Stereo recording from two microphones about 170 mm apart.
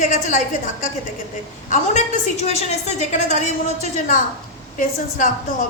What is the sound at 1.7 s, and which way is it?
A woman's voice, 45° left (ahead or behind).